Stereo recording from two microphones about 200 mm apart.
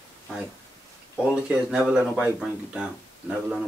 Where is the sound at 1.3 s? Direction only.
5° right (ahead or behind).